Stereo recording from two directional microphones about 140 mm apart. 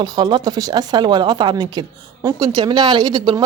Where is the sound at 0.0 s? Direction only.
35° right (ahead or behind).